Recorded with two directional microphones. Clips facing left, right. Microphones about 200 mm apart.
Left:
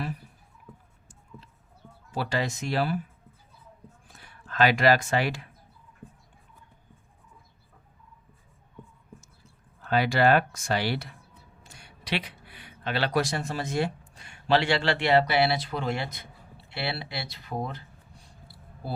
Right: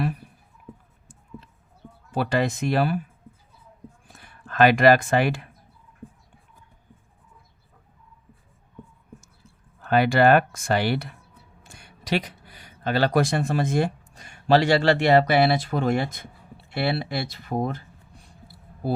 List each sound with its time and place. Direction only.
2.1 s speech: 55° right (ahead or behind)
4.2 s speech: 55° right (ahead or behind)
9.8 s speech: 55° right (ahead or behind)